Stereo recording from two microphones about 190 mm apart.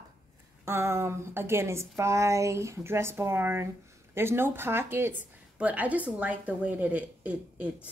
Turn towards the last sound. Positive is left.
turn(degrees=-5)  # may be behind; listen again after turning